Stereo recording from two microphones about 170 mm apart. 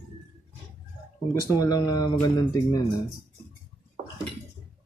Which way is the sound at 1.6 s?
20° left (ahead or behind).